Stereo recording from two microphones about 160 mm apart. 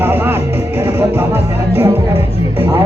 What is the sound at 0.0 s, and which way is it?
Music, 15° right (ahead or behind).